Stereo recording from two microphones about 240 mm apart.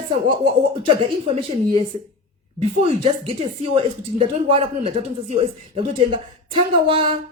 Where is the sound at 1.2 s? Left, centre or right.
Right.